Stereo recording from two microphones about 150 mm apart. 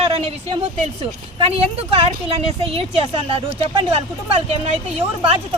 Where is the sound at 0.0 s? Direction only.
40° right (ahead or behind).